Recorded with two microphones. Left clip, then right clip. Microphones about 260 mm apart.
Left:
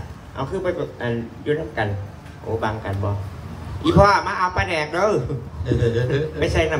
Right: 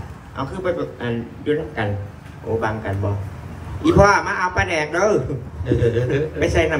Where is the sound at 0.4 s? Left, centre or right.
Left.